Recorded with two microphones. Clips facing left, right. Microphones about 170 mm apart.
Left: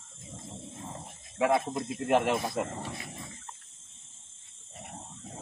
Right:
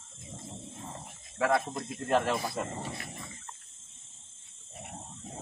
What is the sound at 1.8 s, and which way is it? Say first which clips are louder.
Speech: left 2 dB; 20° left (ahead or behind).